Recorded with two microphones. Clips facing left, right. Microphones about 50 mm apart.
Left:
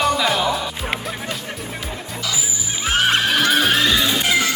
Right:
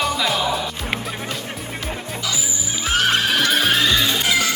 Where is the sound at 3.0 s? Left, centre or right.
Centre.